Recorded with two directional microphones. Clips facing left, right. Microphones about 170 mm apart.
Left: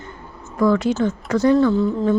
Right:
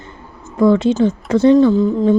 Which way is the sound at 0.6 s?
25° right (ahead or behind).